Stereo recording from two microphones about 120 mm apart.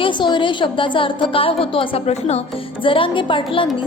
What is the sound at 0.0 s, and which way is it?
A woman's voice, 40° left (ahead or behind).